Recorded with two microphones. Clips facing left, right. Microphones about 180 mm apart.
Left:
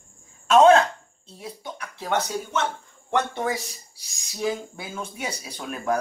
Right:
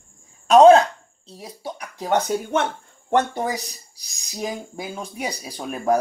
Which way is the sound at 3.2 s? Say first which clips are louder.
Right 3 dB; 40° right (ahead or behind).